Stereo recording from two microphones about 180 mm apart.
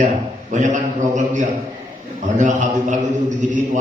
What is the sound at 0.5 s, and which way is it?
Mantra, 40° right (ahead or behind).